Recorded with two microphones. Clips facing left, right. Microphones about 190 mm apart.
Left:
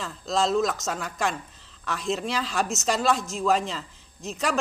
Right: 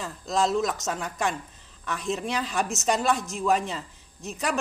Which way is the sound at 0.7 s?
15° right (ahead or behind).